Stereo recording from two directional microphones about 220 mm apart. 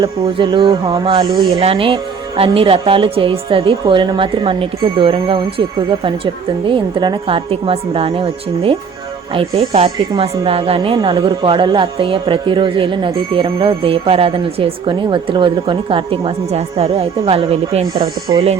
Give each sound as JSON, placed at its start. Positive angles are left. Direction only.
{"t": 0.0, "sound": "speech", "side_deg": -20}